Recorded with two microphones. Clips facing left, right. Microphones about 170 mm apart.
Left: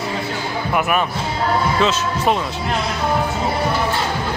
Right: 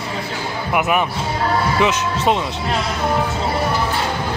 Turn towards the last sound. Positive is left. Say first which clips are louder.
# right 1 dB
turn(degrees=-20)  # may be behind; listen again after turning